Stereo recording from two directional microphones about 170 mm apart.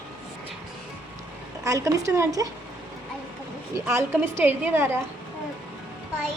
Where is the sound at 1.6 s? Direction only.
20° right (ahead or behind).